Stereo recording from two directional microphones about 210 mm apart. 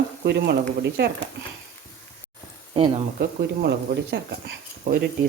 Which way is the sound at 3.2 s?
50° right (ahead or behind).